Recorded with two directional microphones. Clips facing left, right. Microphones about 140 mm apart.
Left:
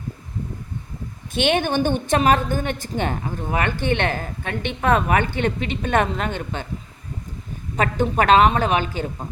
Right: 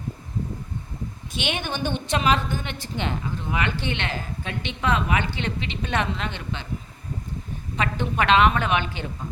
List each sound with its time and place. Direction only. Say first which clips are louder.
1.3 s a woman's voice: left 9 dB; 50° left (ahead or behind)
7.8 s a woman's voice: left 5 dB; 40° left (ahead or behind)